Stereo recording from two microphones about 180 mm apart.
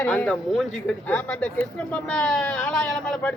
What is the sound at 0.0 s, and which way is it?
A woman's voice, 10° left (ahead or behind).